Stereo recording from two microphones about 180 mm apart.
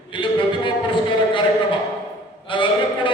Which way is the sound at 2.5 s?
25° left (ahead or behind).